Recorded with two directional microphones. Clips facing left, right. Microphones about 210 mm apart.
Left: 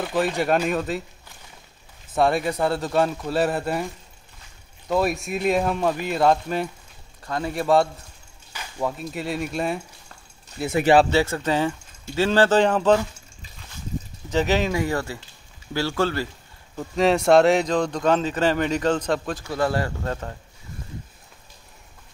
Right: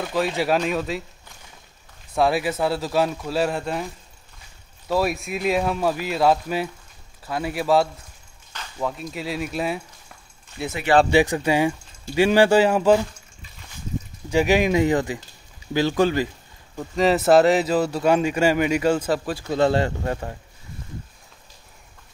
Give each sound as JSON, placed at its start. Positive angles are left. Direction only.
{"t": 0.0, "sound": "speech", "side_deg": 0}
{"t": 2.1, "sound": "speech", "side_deg": 0}
{"t": 4.8, "sound": "speech", "side_deg": 0}
{"t": 8.5, "sound": "a sound", "side_deg": 5}
{"t": 9.1, "sound": "speech", "side_deg": 0}
{"t": 11.1, "sound": "speech", "side_deg": -15}
{"t": 14.3, "sound": "speech", "side_deg": -10}
{"t": 16.7, "sound": "speech", "side_deg": 0}
{"t": 19.4, "sound": "speech", "side_deg": -25}